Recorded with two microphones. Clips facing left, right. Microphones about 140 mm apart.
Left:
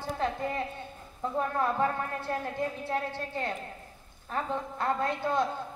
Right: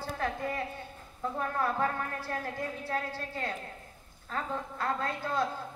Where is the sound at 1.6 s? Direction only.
20° left (ahead or behind).